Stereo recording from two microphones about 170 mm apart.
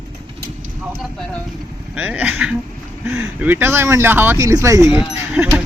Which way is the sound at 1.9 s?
10° right (ahead or behind).